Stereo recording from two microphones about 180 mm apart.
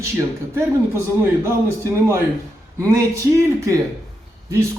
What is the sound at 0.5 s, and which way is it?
Speech, 15° right (ahead or behind).